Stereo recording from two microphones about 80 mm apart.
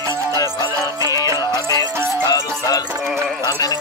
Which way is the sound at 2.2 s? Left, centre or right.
Left.